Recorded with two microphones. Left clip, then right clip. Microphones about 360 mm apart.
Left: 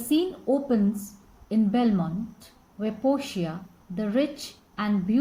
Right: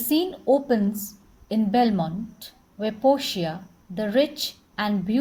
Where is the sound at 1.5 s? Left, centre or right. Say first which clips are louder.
Right 4 dB; right.